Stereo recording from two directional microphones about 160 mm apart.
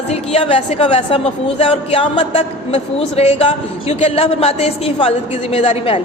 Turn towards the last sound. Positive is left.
turn(degrees=40)  # may be behind; listen again after turning